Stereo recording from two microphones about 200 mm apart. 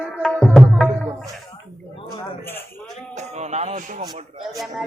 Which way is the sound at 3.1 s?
35° right (ahead or behind).